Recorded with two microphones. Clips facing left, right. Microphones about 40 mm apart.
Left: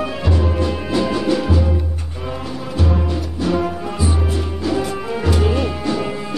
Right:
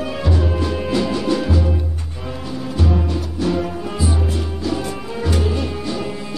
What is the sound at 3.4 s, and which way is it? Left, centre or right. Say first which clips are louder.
Music: left 2 dB; centre.